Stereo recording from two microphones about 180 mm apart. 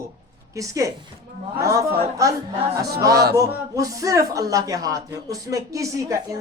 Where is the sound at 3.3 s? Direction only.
20° right (ahead or behind).